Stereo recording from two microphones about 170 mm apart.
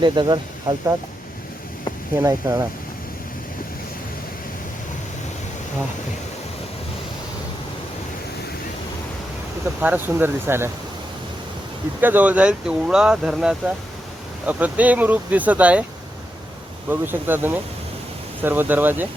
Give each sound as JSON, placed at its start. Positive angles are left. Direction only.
{"t": 0.0, "sound": "speech", "side_deg": -25}
{"t": 2.1, "sound": "speech", "side_deg": -20}
{"t": 9.8, "sound": "speech", "side_deg": -10}
{"t": 11.9, "sound": "speech", "side_deg": -10}
{"t": 16.9, "sound": "speech", "side_deg": -10}